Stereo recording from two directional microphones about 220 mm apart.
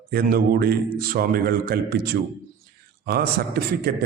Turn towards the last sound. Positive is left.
turn(degrees=-45)  # may be behind; listen again after turning